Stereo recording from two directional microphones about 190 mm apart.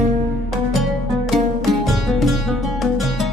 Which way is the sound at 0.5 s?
Centre (ahead or behind).